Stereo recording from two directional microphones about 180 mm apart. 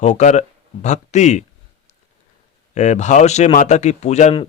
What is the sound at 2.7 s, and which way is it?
Speech, 40° left (ahead or behind).